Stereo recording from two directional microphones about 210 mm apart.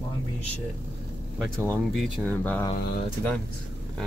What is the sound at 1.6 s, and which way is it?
Speech, 5° left (ahead or behind).